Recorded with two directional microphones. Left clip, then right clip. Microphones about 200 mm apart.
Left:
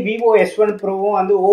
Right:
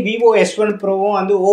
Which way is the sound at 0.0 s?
35° right (ahead or behind).